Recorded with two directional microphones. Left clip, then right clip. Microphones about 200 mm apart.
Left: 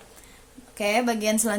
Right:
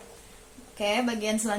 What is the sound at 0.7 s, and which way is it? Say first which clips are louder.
Speech: left 4 dB; 45° left (ahead or behind).